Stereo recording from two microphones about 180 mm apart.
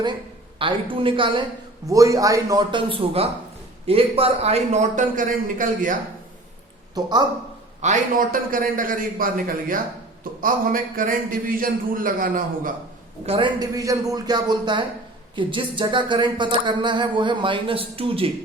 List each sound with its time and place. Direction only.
0.6 s a man's voice: 30° right (ahead or behind); by 6.0 s 50° right (ahead or behind)
6.9 s speech: 25° right (ahead or behind)
7.8 s a man's voice: 45° right (ahead or behind)
13.2 s a man's voice: 30° right (ahead or behind)
13.6 s speech: 20° right (ahead or behind)